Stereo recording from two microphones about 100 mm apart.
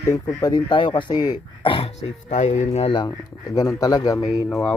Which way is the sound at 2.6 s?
90° left.